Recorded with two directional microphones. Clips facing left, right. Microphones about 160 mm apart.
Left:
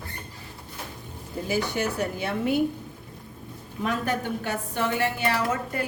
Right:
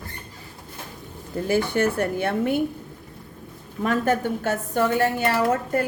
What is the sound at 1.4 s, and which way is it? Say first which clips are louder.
A woman's voice: right 5 dB; 55° right (ahead or behind).